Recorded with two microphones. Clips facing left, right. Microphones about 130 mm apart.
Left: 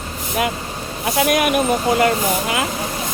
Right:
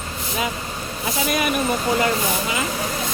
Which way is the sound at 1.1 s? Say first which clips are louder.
Left 5 dB; 65° left (ahead or behind).